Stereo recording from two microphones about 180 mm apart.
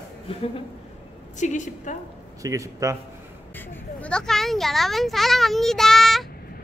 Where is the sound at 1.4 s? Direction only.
45° left (ahead or behind).